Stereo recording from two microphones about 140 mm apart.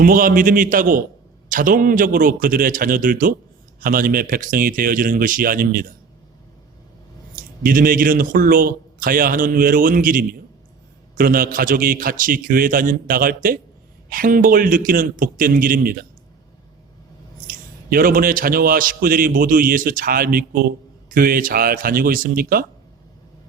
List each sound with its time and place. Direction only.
0.0 s a man's voice: 80° right
3.8 s a man's voice: 90° right
7.3 s a man's voice: 85° right
17.4 s a man's voice: 90° right